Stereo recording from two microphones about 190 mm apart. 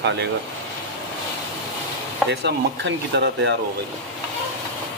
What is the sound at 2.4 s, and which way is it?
Speech, 65° right (ahead or behind).